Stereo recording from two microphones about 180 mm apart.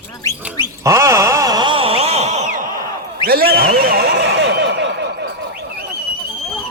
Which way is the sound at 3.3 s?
55° right (ahead or behind).